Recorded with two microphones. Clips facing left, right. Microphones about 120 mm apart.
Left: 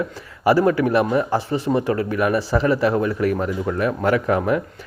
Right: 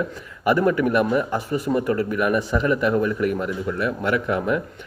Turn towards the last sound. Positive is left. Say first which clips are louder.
# left 3 dB
turn(degrees=40)  # may be behind; listen again after turning